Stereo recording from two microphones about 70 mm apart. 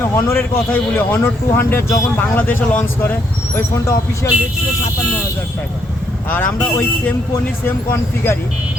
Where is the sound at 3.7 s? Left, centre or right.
Left.